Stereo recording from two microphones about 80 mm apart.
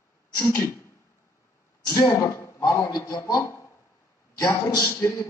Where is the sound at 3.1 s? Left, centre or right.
Left.